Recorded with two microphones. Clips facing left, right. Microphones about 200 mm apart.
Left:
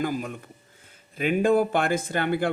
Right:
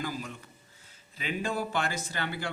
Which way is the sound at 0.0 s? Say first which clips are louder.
Left 8 dB; 50° left (ahead or behind).